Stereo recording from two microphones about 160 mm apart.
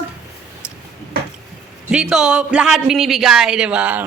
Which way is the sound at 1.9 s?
5° right (ahead or behind).